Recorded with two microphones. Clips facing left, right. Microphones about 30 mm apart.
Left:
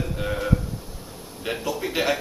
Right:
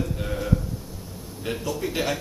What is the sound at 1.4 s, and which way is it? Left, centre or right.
Speech, centre.